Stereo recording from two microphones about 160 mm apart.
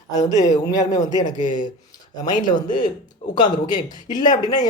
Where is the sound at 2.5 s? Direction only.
55° left (ahead or behind).